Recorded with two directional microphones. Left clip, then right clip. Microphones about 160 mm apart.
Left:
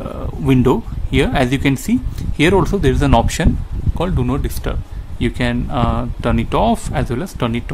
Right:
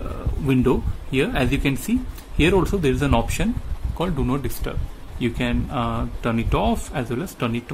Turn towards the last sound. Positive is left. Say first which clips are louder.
# left 5 dB
turn(degrees=30)  # may be behind; listen again after turning